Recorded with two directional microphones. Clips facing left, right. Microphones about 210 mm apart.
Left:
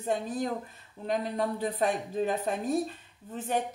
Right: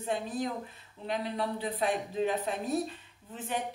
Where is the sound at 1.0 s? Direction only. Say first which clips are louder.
Left 3 dB; 45° left (ahead or behind).